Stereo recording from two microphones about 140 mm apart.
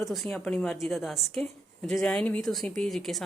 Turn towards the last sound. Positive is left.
turn(degrees=0)  # may be behind; listen again after turning